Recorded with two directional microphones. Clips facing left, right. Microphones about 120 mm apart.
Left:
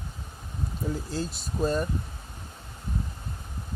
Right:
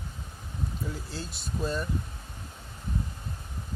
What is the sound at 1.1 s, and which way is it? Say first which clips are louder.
Speech: left 5 dB; 40° left (ahead or behind).